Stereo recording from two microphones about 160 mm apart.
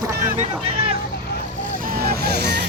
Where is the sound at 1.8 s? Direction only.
70° right (ahead or behind); by 2.7 s 90° right.